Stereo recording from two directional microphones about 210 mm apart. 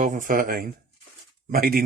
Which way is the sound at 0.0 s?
40° right (ahead or behind).